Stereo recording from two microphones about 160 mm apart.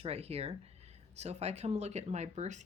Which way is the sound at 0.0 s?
40° right (ahead or behind).